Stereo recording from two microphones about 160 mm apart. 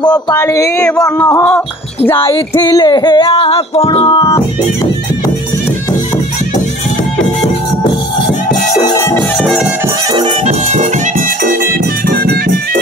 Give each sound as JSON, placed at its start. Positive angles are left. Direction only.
{"t": 0.0, "sound": "speech", "side_deg": 25}
{"t": 0.7, "sound": "a sound", "side_deg": 5}
{"t": 1.0, "sound": "music", "side_deg": 20}
{"t": 8.8, "sound": "speech", "side_deg": 20}
{"t": 10.4, "sound": "music", "side_deg": -45}